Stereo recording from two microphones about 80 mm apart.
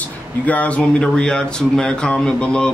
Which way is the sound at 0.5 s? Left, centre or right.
Centre.